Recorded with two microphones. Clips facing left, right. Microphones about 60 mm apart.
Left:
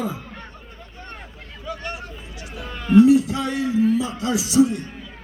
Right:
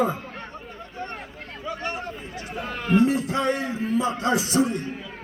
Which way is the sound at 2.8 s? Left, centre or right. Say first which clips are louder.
Left 7 dB; right.